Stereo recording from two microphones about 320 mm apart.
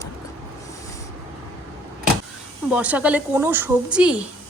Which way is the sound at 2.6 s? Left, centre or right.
Centre.